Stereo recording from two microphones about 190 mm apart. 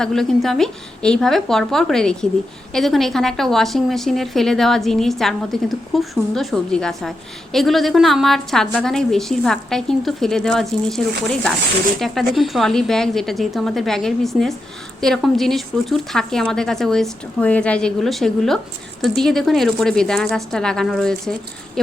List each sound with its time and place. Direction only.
0.0 s a woman's voice: centre (ahead or behind)